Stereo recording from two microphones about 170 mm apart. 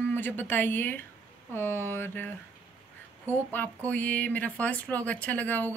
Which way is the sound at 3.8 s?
10° left (ahead or behind).